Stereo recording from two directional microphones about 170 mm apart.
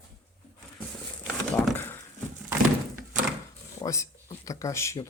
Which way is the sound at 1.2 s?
10° left (ahead or behind).